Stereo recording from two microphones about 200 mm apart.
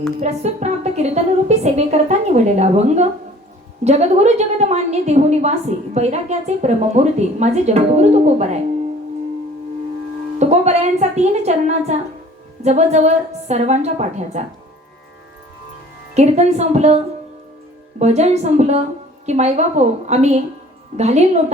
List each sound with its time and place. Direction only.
0.2 s a woman's voice: 35° right (ahead or behind)
10.3 s a woman's voice: 35° right (ahead or behind)
16.1 s a woman's voice: 35° right (ahead or behind)
18.0 s a woman's voice: 35° right (ahead or behind)